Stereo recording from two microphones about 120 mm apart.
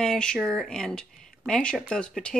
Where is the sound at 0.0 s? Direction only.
5° left (ahead or behind).